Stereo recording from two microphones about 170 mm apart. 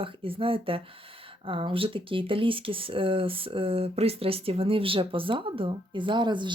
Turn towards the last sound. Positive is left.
turn(degrees=-25)  # may be behind; listen again after turning